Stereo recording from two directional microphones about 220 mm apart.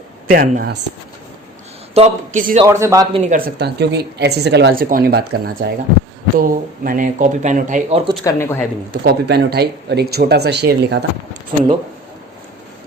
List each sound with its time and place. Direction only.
0.3 s speech: 40° right (ahead or behind)
2.0 s speech: 35° right (ahead or behind)
2.6 s a man's voice: 15° right (ahead or behind)
3.3 s speech: 45° right (ahead or behind); by 8.1 s 25° right (ahead or behind)
8.2 s speech: 15° left (ahead or behind)
9.0 s speech: 50° right (ahead or behind)